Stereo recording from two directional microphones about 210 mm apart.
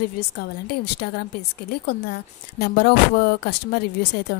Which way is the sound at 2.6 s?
50° left (ahead or behind).